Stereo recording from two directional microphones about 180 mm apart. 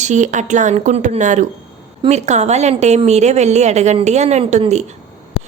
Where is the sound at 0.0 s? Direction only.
40° right (ahead or behind).